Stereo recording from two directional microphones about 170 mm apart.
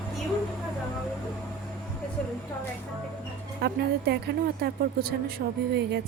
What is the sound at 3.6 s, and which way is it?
A woman's voice, 70° right (ahead or behind).